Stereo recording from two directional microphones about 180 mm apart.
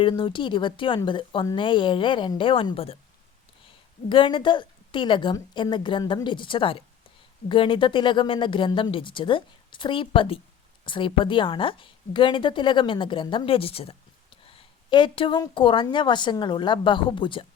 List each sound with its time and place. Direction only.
0.0 s a woman's voice: 25° left (ahead or behind)
4.1 s a woman's voice: 25° left (ahead or behind)